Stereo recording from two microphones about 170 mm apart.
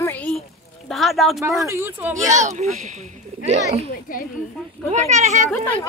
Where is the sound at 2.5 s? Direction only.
45° right (ahead or behind).